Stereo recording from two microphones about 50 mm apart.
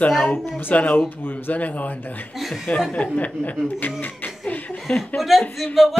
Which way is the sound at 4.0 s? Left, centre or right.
Left.